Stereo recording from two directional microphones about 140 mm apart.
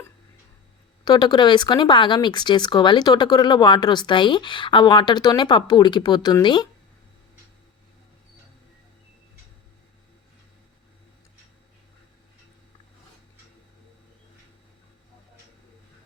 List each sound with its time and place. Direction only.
1.0 s speech: 30° left (ahead or behind)